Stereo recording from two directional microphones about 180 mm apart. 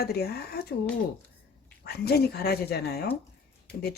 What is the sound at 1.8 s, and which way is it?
Speech, 65° left (ahead or behind).